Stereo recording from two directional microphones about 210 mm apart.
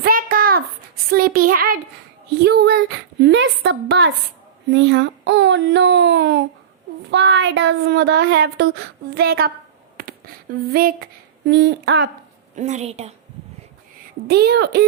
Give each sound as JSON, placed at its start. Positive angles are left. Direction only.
{"t": 0.0, "sound": "child singing", "side_deg": -45}
{"t": 1.1, "sound": "speech", "side_deg": -45}
{"t": 12.5, "sound": "a woman's voice", "side_deg": -35}
{"t": 14.3, "sound": "speech", "side_deg": -50}